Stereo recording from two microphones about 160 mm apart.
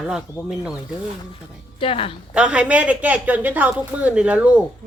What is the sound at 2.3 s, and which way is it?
Speech, 5° right (ahead or behind).